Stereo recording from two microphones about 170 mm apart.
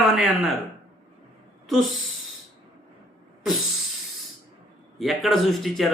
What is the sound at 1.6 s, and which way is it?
Speech, centre (ahead or behind).